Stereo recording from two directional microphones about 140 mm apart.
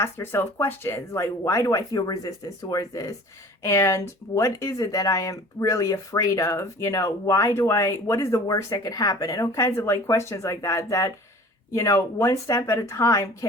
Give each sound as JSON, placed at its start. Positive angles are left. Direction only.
{"t": 0.0, "sound": "speech", "side_deg": 15}